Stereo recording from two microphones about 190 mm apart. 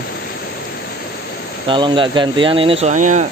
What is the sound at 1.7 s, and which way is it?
Speech, 25° right (ahead or behind).